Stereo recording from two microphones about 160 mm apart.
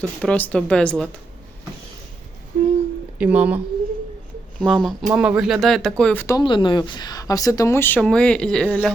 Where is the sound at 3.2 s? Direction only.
10° right (ahead or behind).